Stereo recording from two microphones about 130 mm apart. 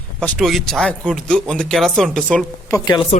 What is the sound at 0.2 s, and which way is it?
Speech, centre (ahead or behind).